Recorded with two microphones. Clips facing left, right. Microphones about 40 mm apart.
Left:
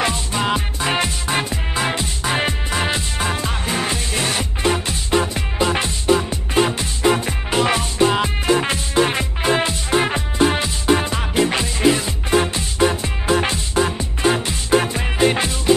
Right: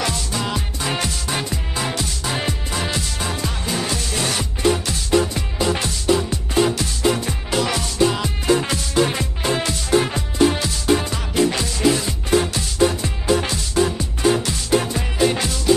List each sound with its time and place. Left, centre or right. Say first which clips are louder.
0.0 s music: left 3 dB; left